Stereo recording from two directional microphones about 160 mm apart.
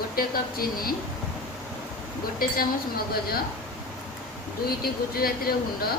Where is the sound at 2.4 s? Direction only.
65° left (ahead or behind).